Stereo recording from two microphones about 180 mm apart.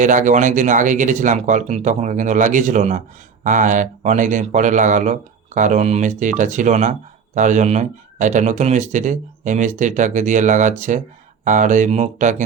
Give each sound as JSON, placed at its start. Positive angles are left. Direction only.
{"t": 0.0, "sound": "a man's voice", "side_deg": -45}